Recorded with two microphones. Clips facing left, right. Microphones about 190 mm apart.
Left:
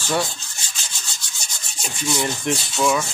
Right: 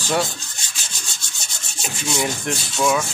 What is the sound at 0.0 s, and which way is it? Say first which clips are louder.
Rub: right 1 dB; 15° right (ahead or behind).